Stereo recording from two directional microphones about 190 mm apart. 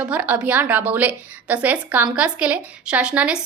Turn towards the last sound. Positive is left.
turn(degrees=-5)  # may be behind; listen again after turning